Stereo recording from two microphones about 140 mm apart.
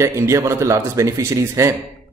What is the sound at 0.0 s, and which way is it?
A man's voice, 20° right (ahead or behind).